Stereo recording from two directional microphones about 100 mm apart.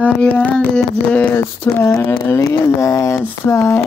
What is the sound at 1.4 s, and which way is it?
Speech, 25° left (ahead or behind).